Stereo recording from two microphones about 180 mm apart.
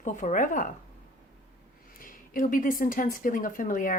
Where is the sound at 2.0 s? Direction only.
50° left (ahead or behind).